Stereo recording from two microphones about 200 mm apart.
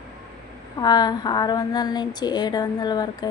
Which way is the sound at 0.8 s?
20° left (ahead or behind).